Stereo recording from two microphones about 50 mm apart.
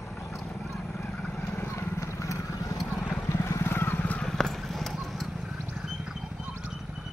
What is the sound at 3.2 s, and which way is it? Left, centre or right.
Vehicle, left.